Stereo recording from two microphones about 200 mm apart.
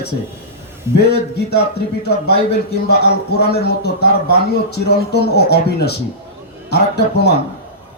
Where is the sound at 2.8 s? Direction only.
55° left (ahead or behind).